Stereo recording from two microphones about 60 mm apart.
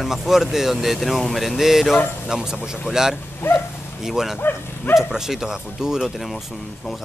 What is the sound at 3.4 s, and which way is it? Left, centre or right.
Speech, left.